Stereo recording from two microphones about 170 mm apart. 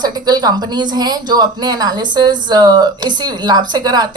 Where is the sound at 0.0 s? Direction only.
25° right (ahead or behind).